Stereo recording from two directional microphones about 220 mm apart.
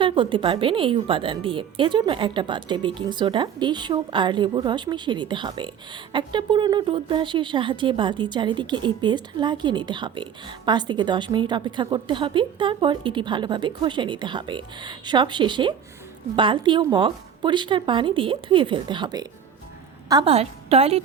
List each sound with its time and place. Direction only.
0.0 s a woman's voice: 20° right (ahead or behind)